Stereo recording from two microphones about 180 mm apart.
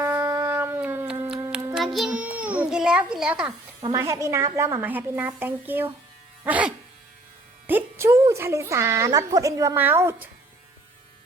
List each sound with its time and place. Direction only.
0.0 s howl: 15° right (ahead or behind)
1.7 s a child's voice: centre (ahead or behind)
3.8 s speech: 25° right (ahead or behind)
4.0 s a woman's voice: 15° right (ahead or behind)